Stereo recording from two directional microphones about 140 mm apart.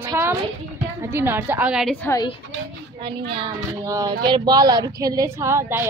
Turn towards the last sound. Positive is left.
turn(degrees=-20)  # may be behind; listen again after turning